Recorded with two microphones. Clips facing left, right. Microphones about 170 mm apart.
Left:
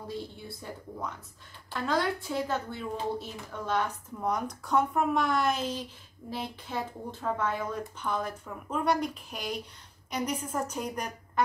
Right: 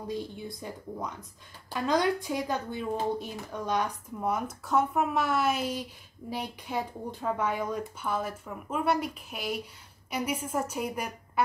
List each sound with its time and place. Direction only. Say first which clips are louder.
0.1 s speech: right 4 dB; 15° right (ahead or behind)